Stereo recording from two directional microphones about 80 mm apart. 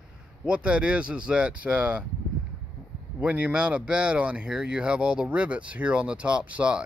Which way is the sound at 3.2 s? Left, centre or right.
Centre.